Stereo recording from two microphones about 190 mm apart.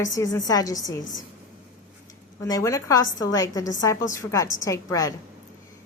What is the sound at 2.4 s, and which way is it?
A woman's voice, 15° left (ahead or behind).